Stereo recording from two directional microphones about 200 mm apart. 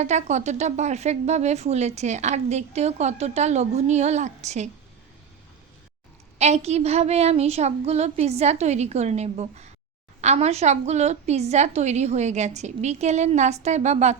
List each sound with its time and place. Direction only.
0.0 s speech: 35° right (ahead or behind)
6.4 s speech: 30° right (ahead or behind)